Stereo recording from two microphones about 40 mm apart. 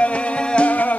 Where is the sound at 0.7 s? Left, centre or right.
Left.